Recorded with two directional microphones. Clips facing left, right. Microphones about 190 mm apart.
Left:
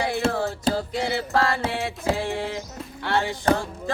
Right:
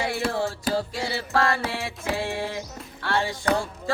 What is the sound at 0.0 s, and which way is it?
Music, 20° left (ahead or behind).